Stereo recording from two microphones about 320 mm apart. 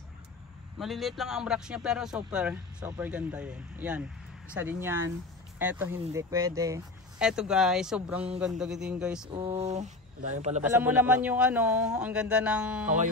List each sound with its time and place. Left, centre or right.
0.7 s a man's voice: centre
9.3 s speech: centre
10.6 s a man's voice: centre